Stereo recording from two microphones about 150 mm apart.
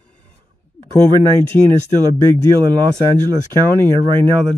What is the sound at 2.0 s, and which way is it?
Speech, 30° right (ahead or behind).